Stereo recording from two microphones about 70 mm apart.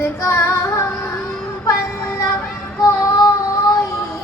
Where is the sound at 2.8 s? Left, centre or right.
Left.